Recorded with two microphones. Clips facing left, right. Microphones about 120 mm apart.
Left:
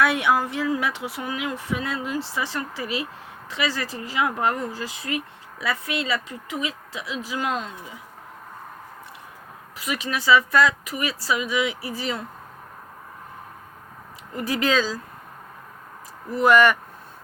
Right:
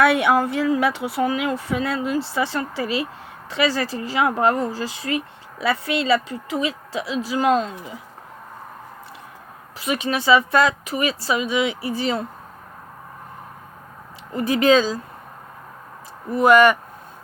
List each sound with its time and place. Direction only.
0.0 s speech: 60° right (ahead or behind)
0.9 s speech: 35° right (ahead or behind)
9.7 s speech: 25° right (ahead or behind)
14.3 s speech: 25° right (ahead or behind)
16.3 s speech: 15° right (ahead or behind)